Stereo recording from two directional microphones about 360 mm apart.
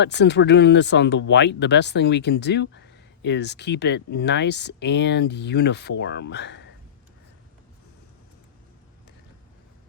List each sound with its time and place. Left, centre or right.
0.0 s speech: left